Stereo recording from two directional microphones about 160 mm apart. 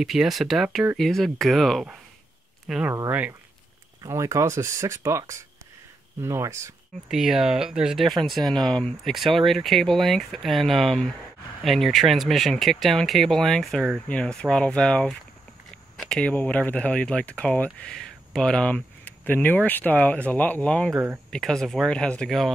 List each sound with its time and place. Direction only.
0.0 s speech: centre (ahead or behind)
2.9 s speech: 15° right (ahead or behind)
7.1 s speech: 5° right (ahead or behind)